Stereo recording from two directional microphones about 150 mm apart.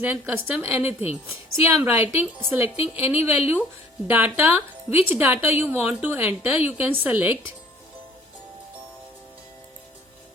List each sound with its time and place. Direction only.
0.0 s a woman's voice: 15° right (ahead or behind)